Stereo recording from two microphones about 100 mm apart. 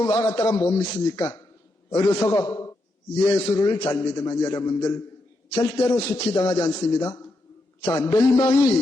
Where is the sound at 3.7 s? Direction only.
40° left (ahead or behind).